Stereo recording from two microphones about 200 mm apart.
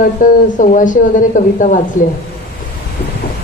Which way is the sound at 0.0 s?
40° left (ahead or behind).